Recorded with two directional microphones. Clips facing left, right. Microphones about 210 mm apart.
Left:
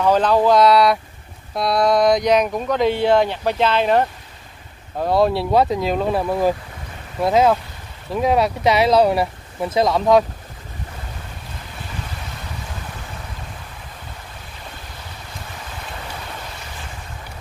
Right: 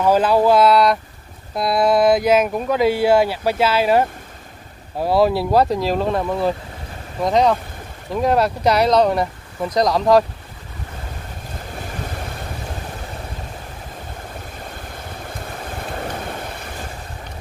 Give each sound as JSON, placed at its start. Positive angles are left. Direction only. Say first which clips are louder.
{"t": 0.0, "sound": "speech", "louder": "right 1 dB", "side_deg": -10}
{"t": 15.9, "sound": "vehicle", "louder": "right 7 dB", "side_deg": -50}